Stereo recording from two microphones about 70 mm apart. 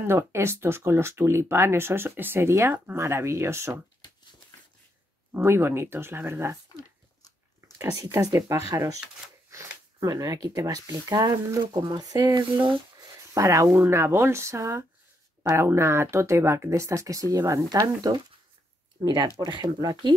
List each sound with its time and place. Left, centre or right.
0.0 s speech: right
5.3 s speech: right
6.8 s biting: left
7.8 s speech: right
9.5 s a sound: right
10.0 s speech: right
13.3 s speech: right
17.6 s speech: right
19.5 s speech: right